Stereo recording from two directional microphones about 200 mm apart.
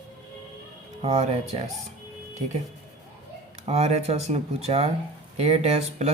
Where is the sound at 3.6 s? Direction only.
30° right (ahead or behind).